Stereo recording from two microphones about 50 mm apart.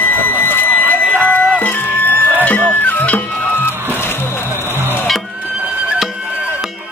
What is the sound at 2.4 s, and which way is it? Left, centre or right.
Music, left.